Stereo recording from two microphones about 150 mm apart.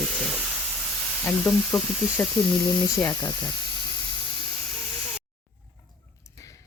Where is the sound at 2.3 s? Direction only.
25° left (ahead or behind).